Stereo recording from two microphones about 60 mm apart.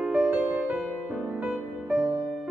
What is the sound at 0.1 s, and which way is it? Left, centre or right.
Music, right.